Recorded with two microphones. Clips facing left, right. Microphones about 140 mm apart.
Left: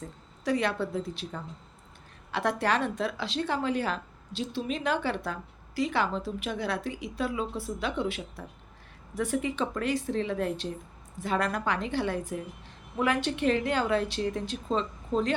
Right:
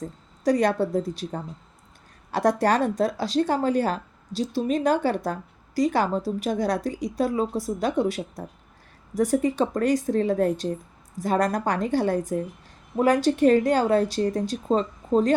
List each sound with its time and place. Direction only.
0.0 s a woman's voice: 40° right (ahead or behind)